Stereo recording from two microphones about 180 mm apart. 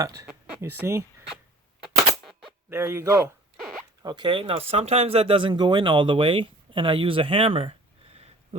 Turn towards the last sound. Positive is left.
turn(degrees=-30)  # may be behind; listen again after turning